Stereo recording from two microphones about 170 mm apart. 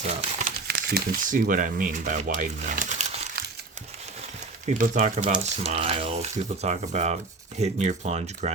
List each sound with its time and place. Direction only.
0.0 s speech: 40° right (ahead or behind)
0.7 s crumpling: 70° right (ahead or behind)
1.2 s speech: 50° right (ahead or behind)
4.8 s speech: 50° right (ahead or behind)
5.2 s speech: 35° right (ahead or behind)